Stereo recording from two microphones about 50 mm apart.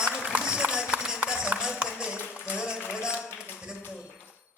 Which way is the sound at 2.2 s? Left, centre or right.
Left.